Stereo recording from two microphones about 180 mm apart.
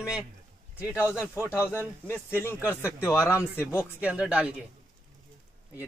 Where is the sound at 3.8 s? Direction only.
5° right (ahead or behind).